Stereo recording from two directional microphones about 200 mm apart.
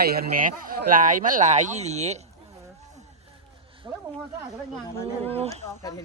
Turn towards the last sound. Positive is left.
turn(degrees=15)  # may be behind; listen again after turning